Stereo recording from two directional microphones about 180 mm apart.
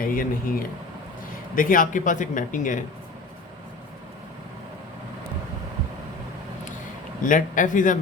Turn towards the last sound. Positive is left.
turn(degrees=45)  # may be behind; listen again after turning